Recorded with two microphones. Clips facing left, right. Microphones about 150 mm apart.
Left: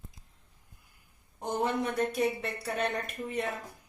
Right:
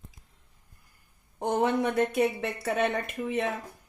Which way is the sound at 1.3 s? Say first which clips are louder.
Right 5 dB; 75° right (ahead or behind).